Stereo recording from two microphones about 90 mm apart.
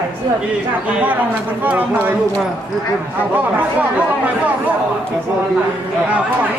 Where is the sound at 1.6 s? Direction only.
20° right (ahead or behind).